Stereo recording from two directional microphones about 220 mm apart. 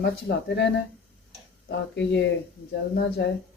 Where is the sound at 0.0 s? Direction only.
50° left (ahead or behind).